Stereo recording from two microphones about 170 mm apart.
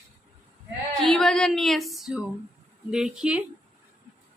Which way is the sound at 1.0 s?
5° left (ahead or behind).